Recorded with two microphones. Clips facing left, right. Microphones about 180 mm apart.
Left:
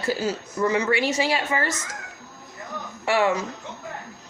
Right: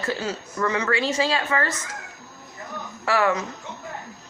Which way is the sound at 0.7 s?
25° left (ahead or behind).